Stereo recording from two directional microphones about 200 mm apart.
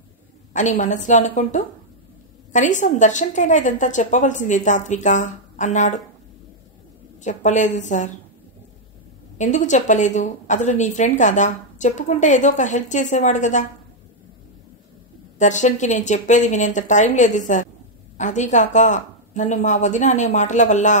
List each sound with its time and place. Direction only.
0.5 s speech: 40° left (ahead or behind)
7.2 s speech: 35° left (ahead or behind)
9.4 s speech: 35° left (ahead or behind)
15.3 s speech: 35° left (ahead or behind)